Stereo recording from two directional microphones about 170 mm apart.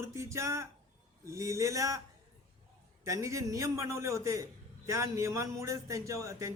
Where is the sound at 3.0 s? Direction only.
20° right (ahead or behind).